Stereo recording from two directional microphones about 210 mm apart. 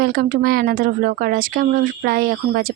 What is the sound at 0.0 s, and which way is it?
Speech, 45° right (ahead or behind).